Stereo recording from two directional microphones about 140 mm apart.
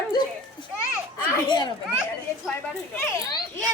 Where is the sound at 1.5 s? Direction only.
30° left (ahead or behind).